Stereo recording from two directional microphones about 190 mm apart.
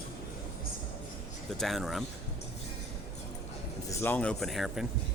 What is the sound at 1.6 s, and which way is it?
Speech, centre (ahead or behind).